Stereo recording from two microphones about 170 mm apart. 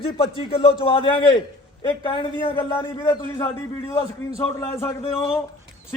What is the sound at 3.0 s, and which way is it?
A man's voice, 20° left (ahead or behind).